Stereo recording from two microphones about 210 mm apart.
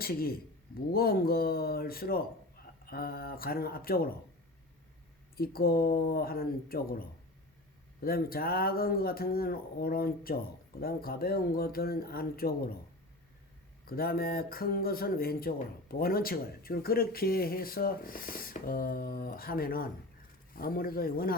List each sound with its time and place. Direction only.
0.0 s speech: 45° left (ahead or behind)
5.4 s speech: 45° left (ahead or behind)
8.0 s speech: 45° left (ahead or behind)
13.8 s speech: 45° left (ahead or behind)